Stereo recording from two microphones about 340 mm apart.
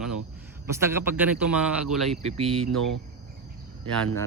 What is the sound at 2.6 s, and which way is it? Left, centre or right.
Speech, right.